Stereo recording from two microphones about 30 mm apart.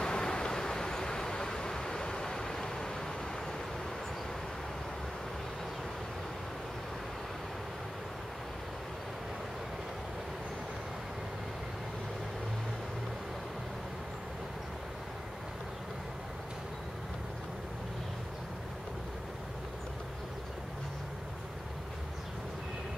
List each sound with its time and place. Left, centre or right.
0.0 s vehicle: left